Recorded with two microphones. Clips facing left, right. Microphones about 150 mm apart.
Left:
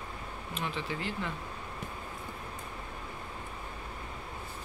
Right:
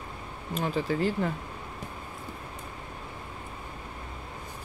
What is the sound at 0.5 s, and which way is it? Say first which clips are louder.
Speech: right 8 dB; 40° right (ahead or behind).